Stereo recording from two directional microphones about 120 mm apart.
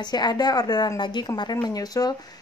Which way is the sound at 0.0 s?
35° left (ahead or behind).